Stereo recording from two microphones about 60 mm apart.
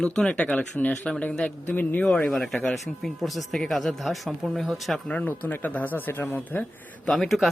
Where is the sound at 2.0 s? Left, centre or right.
Centre.